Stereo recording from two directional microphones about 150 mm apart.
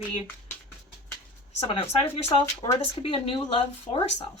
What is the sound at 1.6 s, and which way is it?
Speech, 40° left (ahead or behind).